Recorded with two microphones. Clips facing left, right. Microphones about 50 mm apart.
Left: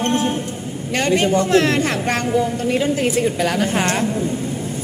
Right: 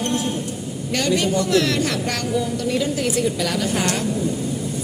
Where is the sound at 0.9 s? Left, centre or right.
Left.